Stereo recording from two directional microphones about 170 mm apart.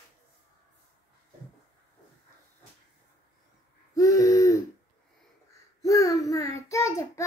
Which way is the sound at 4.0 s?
20° left (ahead or behind).